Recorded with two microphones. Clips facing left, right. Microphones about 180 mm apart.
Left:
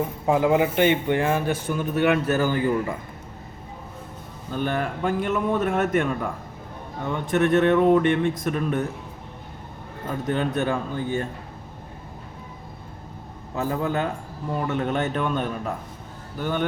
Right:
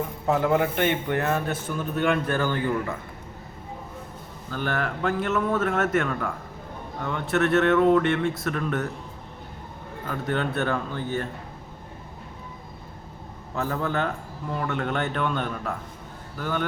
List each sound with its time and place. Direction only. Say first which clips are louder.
0.3 s a man's voice: left 2 dB; 10° left (ahead or behind)
4.5 s a man's voice: left 2 dB; 15° left (ahead or behind)
10.1 s a man's voice: left 2 dB; 15° left (ahead or behind)
13.6 s a man's voice: left 2 dB; 15° left (ahead or behind)